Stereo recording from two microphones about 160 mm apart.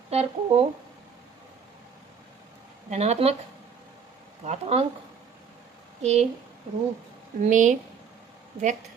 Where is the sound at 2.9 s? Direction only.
40° right (ahead or behind).